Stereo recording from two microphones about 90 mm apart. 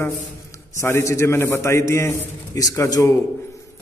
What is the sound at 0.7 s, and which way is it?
A man's voice, 30° left (ahead or behind).